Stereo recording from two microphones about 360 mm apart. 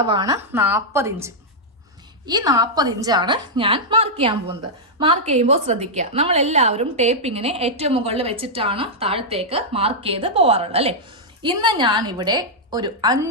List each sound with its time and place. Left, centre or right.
0.1 s a woman's voice: centre